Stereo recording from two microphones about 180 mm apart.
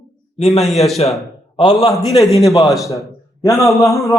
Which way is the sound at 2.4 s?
15° left (ahead or behind).